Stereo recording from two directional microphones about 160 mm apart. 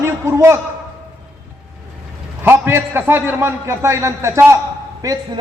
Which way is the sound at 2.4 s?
15° right (ahead or behind).